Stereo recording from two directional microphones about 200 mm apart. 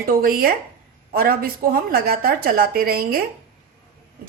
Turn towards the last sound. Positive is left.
turn(degrees=-45)  # may be behind; listen again after turning